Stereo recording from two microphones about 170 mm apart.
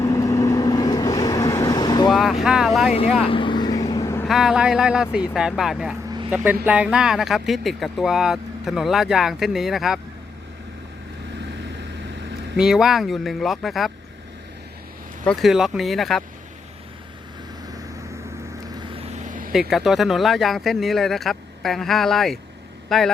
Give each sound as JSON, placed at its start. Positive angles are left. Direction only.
{"t": 0.0, "sound": "vehicle", "side_deg": 20}
{"t": 2.0, "sound": "vehicle", "side_deg": 0}
{"t": 2.9, "sound": "speech", "side_deg": 35}
{"t": 3.2, "sound": "vehicle", "side_deg": 30}
{"t": 4.3, "sound": "speech", "side_deg": 0}
{"t": 12.5, "sound": "speech", "side_deg": -5}
{"t": 15.2, "sound": "speech", "side_deg": 5}
{"t": 18.9, "sound": "vehicle", "side_deg": -40}
{"t": 19.7, "sound": "speech", "side_deg": 0}